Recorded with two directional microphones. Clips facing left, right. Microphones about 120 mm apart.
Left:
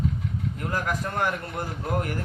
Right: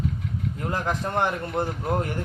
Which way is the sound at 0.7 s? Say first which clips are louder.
Right 2 dB; 25° right (ahead or behind).